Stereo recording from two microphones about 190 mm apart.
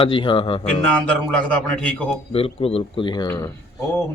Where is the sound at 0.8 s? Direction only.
5° left (ahead or behind).